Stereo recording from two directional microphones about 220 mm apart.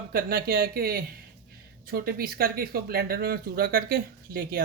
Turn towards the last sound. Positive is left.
turn(degrees=-45)  # may be behind; listen again after turning